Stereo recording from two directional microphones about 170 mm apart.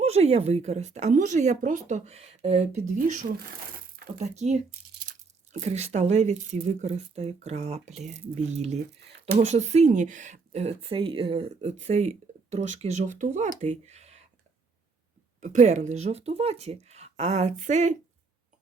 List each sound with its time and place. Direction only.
0.0 s speech: 40° right (ahead or behind)
15.4 s speech: 45° right (ahead or behind)